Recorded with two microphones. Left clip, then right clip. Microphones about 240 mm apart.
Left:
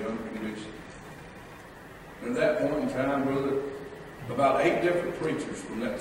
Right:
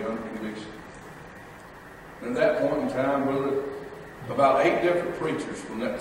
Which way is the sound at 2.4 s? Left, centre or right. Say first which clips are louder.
Right 3 dB; centre.